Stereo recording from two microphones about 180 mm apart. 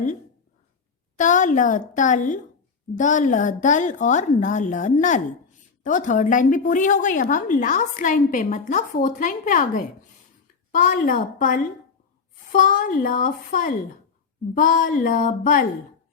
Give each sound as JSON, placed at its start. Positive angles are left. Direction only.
{"t": 1.1, "sound": "a woman's voice", "side_deg": 45}